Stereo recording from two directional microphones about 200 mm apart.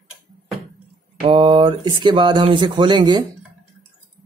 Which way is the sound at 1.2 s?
30° right (ahead or behind).